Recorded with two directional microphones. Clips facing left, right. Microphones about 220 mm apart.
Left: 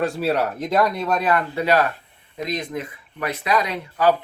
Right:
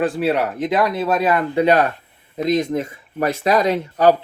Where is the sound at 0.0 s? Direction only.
Centre (ahead or behind); by 2.7 s 25° right (ahead or behind).